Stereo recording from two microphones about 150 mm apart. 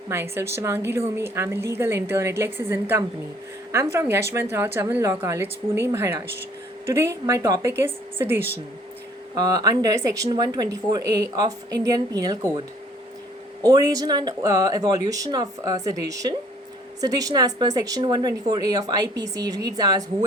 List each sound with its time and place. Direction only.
0.1 s speech: 15° right (ahead or behind)
9.3 s speech: 25° right (ahead or behind)
13.7 s speech: 25° right (ahead or behind)